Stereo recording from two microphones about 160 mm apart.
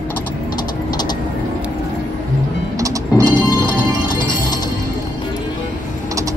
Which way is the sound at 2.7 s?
20° right (ahead or behind).